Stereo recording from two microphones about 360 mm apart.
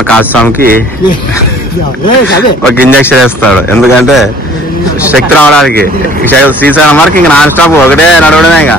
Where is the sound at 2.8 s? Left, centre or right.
Centre.